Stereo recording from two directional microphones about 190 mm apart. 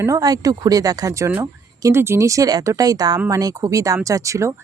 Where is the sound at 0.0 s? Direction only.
20° right (ahead or behind).